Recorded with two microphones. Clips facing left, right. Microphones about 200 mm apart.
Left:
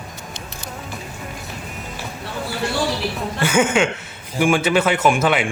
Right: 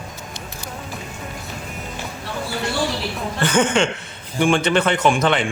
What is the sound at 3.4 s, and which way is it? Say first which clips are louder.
Speech: left 1 dB; 10° left (ahead or behind).